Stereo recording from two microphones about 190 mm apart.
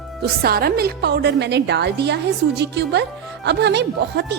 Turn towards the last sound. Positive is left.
turn(degrees=-65)  # may be behind; listen again after turning